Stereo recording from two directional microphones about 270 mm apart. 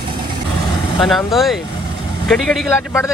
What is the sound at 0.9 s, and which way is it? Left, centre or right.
Speech, centre.